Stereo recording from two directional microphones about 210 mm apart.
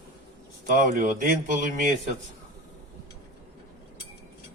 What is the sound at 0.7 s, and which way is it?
Speech, 40° right (ahead or behind).